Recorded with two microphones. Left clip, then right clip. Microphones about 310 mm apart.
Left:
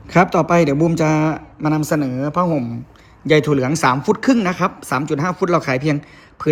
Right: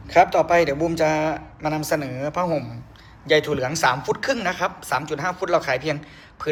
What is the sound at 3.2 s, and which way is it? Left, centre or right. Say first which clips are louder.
Speech: left 4 dB; centre.